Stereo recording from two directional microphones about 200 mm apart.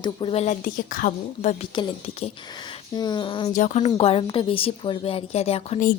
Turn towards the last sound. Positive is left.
turn(degrees=30)  # may be behind; listen again after turning